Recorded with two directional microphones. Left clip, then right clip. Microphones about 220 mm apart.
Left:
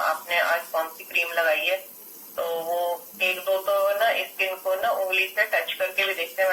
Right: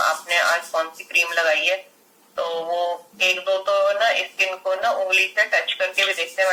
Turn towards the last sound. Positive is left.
turn(degrees=-45)  # may be behind; listen again after turning